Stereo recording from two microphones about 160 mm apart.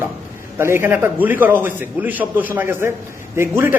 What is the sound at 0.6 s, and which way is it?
A man's voice, 15° right (ahead or behind).